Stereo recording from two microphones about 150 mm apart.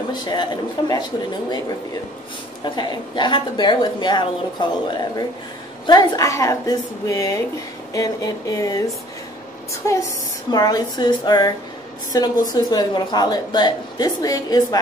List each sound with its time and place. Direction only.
0.1 s a woman's voice: 30° left (ahead or behind)
2.6 s a woman's voice: 30° left (ahead or behind)
5.9 s a woman's voice: 25° left (ahead or behind)
9.8 s a woman's voice: 20° left (ahead or behind)